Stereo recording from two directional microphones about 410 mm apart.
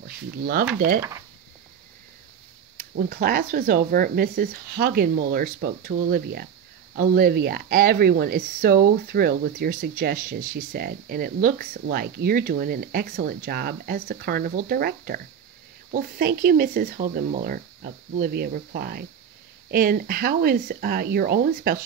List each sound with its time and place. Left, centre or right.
0.0 s speech: right
2.8 s speech: right